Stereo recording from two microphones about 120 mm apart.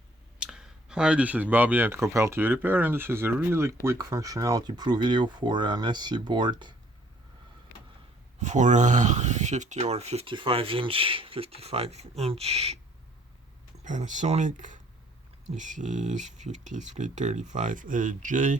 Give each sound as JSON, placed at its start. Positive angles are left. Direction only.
{"t": 0.3, "sound": "speech", "side_deg": -5}
{"t": 8.4, "sound": "speech", "side_deg": -90}
{"t": 10.2, "sound": "speech", "side_deg": -45}
{"t": 13.8, "sound": "speech", "side_deg": -90}